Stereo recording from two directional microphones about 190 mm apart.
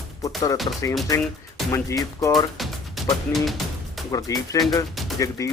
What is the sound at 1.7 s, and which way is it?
Speech, 15° left (ahead or behind).